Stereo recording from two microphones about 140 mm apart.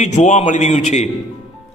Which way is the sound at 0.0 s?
55° left (ahead or behind).